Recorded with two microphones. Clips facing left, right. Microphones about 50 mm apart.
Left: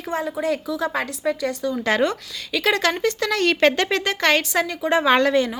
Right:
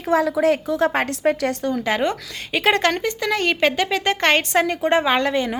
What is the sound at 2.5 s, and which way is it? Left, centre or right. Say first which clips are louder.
Speech: right 2 dB; right.